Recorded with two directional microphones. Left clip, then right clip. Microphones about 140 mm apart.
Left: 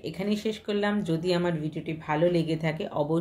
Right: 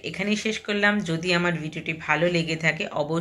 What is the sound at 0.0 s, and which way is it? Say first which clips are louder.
A woman's voice: right 4 dB; 10° left (ahead or behind).